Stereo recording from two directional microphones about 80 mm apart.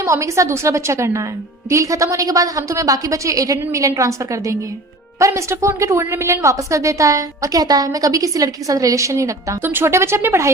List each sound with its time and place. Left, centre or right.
0.0 s a woman's voice: right
9.6 s a woman's voice: right